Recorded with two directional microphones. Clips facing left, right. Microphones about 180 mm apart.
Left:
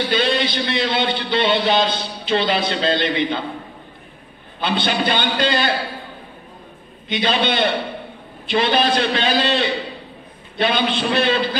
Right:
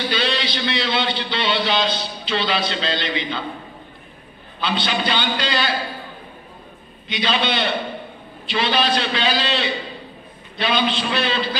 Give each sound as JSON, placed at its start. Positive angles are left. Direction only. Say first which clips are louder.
{"t": 0.1, "sound": "a man's voice", "louder": "left 4 dB", "side_deg": 50}
{"t": 4.6, "sound": "a man's voice", "louder": "left 3 dB", "side_deg": 50}
{"t": 7.1, "sound": "a man's voice", "louder": "left 2 dB", "side_deg": 50}